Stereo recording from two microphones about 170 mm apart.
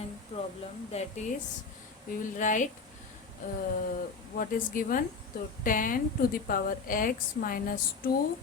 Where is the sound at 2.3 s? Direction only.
50° left (ahead or behind).